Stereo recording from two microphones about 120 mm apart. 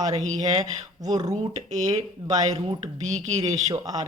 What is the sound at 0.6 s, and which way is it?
Speech, 30° right (ahead or behind).